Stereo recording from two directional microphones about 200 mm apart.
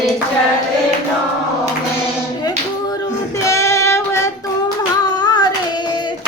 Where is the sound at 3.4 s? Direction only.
15° left (ahead or behind).